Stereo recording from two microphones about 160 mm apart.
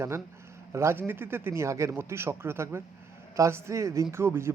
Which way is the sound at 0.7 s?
15° right (ahead or behind).